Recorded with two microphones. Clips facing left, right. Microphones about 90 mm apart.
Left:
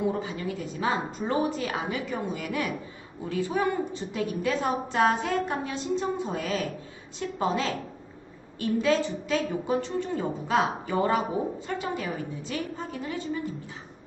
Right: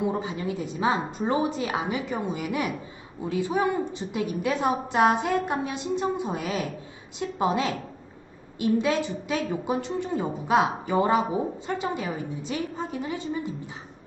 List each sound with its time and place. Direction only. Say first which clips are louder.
0.0 s a woman's voice: right 1 dB; 20° right (ahead or behind)